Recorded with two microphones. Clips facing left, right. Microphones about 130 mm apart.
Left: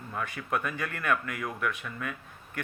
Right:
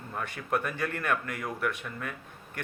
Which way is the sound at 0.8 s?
45° right (ahead or behind).